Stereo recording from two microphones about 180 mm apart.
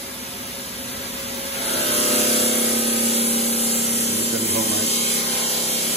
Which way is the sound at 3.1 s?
35° left (ahead or behind).